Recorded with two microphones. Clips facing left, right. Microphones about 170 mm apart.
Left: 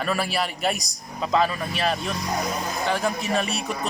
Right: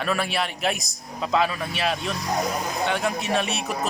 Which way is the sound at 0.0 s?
Centre (ahead or behind).